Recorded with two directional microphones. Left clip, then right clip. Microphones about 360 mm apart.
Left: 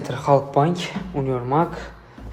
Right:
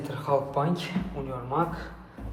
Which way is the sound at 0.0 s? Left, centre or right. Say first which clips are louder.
Left 8 dB; centre.